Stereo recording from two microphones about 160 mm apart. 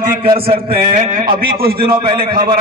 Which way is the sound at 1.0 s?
60° right (ahead or behind).